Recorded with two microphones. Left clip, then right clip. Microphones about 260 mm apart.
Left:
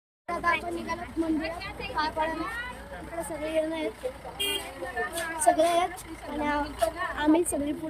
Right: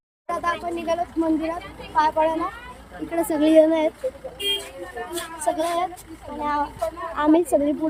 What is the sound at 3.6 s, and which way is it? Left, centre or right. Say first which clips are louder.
Speech: right 12 dB; centre.